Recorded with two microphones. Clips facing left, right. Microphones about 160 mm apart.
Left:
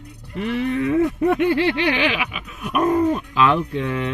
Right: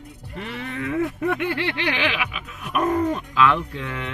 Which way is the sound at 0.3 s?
15° left (ahead or behind).